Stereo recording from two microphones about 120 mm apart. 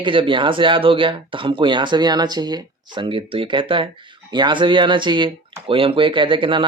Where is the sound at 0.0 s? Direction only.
45° right (ahead or behind).